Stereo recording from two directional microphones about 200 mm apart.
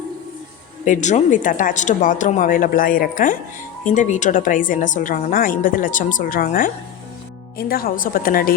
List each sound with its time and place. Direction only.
0.9 s a woman's voice: 40° left (ahead or behind)